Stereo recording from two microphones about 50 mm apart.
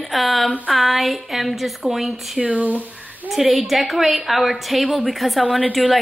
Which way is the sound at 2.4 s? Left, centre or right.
Right.